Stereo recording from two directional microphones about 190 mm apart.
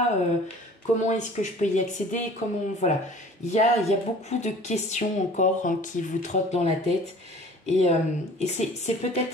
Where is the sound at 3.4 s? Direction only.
35° left (ahead or behind).